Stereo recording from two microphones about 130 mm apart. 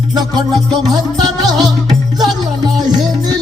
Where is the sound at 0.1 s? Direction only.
30° right (ahead or behind).